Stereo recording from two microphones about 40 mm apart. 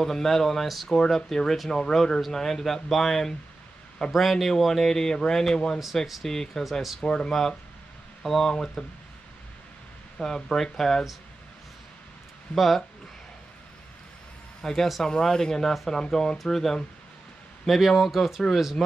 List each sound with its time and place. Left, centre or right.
0.0 s speech: centre
8.2 s speech: centre
8.5 s speech: centre
10.1 s speech: centre
12.5 s speech: centre
14.6 s speech: centre